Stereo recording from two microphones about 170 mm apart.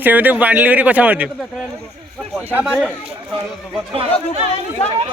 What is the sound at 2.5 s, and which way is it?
Speech, 10° right (ahead or behind).